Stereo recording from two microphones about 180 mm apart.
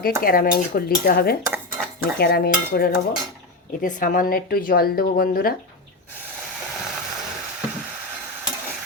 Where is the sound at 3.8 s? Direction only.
50° left (ahead or behind).